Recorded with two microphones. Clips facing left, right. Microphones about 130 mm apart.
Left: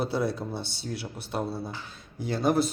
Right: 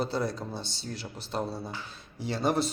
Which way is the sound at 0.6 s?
60° left (ahead or behind).